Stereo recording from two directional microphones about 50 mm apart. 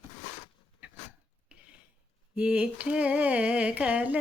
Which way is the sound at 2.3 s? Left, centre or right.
Right.